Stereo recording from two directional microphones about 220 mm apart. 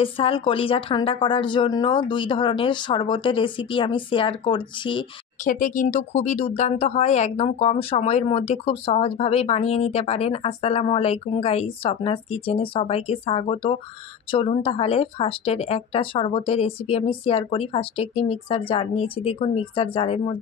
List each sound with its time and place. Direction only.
0.0 s speech: 25° left (ahead or behind)
5.4 s speech: 35° left (ahead or behind)